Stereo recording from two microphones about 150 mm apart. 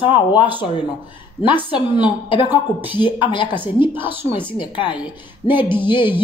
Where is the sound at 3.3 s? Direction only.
35° left (ahead or behind).